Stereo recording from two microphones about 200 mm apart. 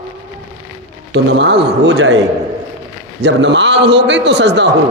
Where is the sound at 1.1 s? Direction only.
65° right (ahead or behind).